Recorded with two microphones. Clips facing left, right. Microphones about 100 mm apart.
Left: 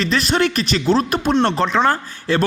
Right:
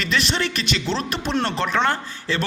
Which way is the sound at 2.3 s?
50° left (ahead or behind).